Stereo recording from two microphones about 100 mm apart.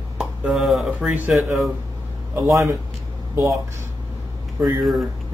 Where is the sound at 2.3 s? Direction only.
30° right (ahead or behind).